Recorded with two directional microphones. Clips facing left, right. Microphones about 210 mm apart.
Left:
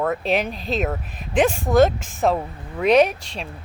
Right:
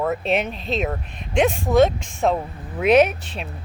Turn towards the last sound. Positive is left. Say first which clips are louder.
# even
turn(degrees=-5)  # may be behind; listen again after turning